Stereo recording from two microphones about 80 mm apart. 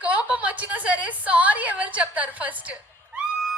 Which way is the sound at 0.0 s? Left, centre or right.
Centre.